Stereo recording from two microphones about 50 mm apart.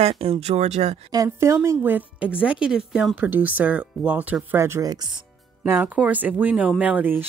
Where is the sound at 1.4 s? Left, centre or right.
Right.